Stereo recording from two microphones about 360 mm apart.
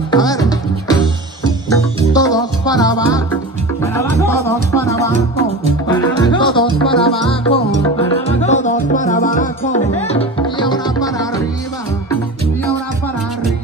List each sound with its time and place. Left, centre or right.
0.1 s music: centre
6.3 s music: centre